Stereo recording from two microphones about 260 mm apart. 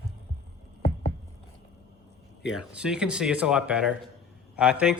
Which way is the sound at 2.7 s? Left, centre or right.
Centre.